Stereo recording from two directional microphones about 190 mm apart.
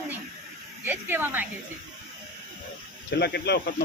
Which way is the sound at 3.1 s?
60° left (ahead or behind).